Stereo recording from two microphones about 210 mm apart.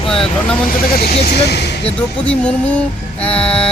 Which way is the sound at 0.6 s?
45° left (ahead or behind).